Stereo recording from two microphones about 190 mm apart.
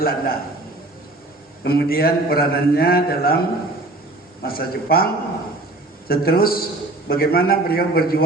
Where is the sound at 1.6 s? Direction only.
60° left (ahead or behind).